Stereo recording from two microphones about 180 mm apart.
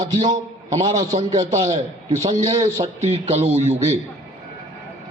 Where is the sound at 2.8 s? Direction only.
35° right (ahead or behind).